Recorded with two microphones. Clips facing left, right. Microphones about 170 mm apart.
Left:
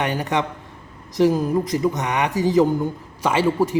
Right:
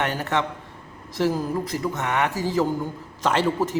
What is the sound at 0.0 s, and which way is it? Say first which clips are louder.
Speech: left 2 dB; 15° left (ahead or behind).